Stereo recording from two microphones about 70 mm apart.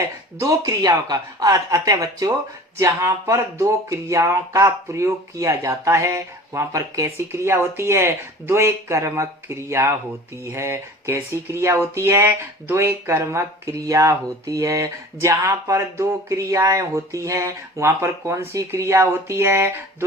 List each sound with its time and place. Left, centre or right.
0.3 s speech: right
2.7 s speech: right